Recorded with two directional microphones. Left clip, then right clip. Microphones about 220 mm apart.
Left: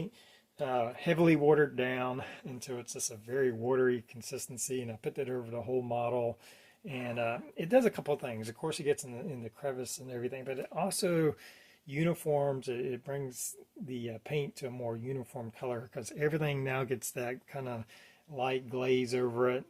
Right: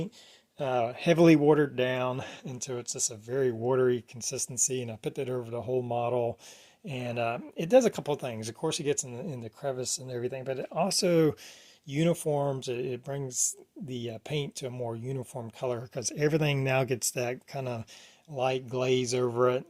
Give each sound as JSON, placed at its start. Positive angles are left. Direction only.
{"t": 0.6, "sound": "speech", "side_deg": -40}